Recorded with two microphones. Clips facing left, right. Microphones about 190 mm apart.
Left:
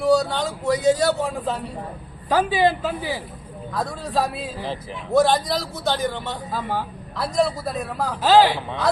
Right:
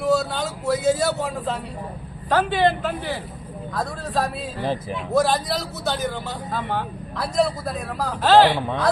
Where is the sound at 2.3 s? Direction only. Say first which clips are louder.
Even; 10° left (ahead or behind).